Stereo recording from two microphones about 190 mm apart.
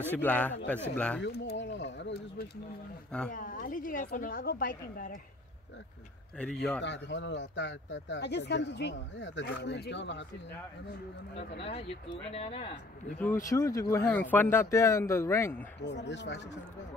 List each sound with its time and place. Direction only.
0.0 s speech: 10° left (ahead or behind)
1.2 s speech: 60° left (ahead or behind)
3.3 s a woman's voice: 45° left (ahead or behind)
6.3 s a man's voice: 5° left (ahead or behind)
6.8 s speech: 70° left (ahead or behind)
11.3 s speech: 30° left (ahead or behind)
13.5 s speech: 20° left (ahead or behind)
15.8 s speech: 65° left (ahead or behind)